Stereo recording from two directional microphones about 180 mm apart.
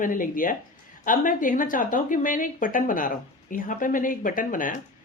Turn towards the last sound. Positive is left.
turn(degrees=50)  # may be behind; listen again after turning